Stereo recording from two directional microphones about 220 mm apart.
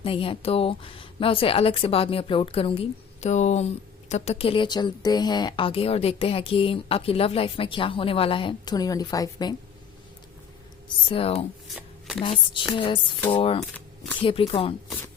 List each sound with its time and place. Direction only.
0.0 s speech: 25° left (ahead or behind)
10.8 s speech: 25° left (ahead or behind)
11.7 s shuffling cards: centre (ahead or behind)
12.2 s speech: 20° left (ahead or behind)